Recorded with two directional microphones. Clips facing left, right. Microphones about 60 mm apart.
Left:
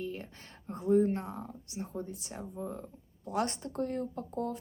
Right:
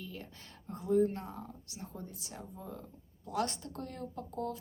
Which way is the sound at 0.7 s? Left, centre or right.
Left.